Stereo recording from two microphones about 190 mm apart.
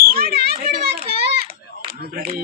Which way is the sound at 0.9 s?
30° right (ahead or behind).